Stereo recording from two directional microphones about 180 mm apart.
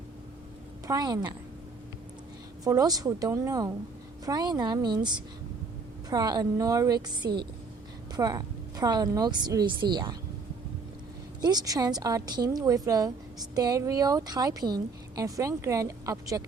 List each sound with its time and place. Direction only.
0.9 s a woman's voice: 20° right (ahead or behind)
2.6 s a woman's voice: 20° right (ahead or behind)
11.3 s a woman's voice: 20° right (ahead or behind)